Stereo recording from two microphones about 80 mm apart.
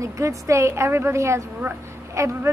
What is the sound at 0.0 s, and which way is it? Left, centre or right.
A woman's voice, right.